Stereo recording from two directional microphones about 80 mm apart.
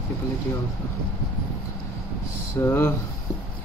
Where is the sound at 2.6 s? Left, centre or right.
Left.